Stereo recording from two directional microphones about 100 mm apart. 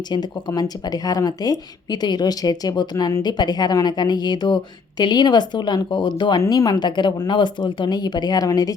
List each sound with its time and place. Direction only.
0.1 s speech: 45° left (ahead or behind)
6.4 s speech: 35° left (ahead or behind)